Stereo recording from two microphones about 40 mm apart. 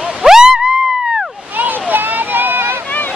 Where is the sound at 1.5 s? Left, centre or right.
Right.